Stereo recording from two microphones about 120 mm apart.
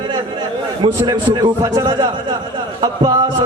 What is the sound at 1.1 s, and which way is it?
Speech, 35° right (ahead or behind).